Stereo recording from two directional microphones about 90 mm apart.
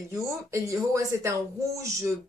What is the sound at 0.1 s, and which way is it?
Speech, 35° right (ahead or behind).